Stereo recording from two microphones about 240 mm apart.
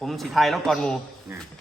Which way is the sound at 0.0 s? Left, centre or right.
Centre.